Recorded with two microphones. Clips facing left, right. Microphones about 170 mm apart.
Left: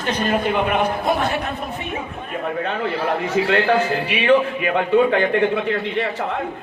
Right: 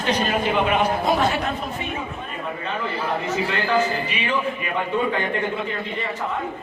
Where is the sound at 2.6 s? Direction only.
60° left (ahead or behind).